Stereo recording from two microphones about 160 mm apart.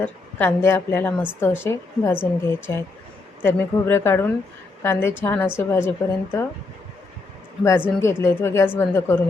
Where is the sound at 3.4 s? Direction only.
15° left (ahead or behind).